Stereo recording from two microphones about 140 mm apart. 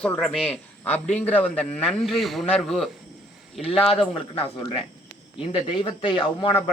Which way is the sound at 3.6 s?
40° left (ahead or behind).